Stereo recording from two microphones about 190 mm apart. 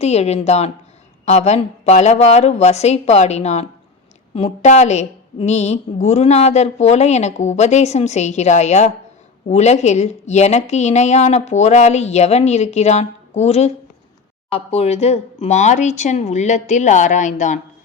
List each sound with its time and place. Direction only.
0.0 s a woman's voice: 35° left (ahead or behind)